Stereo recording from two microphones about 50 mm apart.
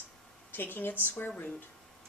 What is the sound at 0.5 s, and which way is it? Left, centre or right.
Speech, left.